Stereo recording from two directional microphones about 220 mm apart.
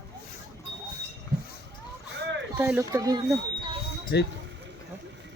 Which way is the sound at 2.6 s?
10° right (ahead or behind).